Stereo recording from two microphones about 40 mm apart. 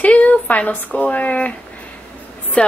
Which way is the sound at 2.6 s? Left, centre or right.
Left.